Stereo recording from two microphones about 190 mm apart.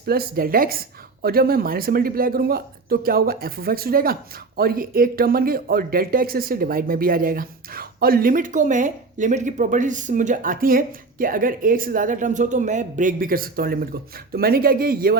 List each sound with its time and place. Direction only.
0.0 s speech: 50° right (ahead or behind)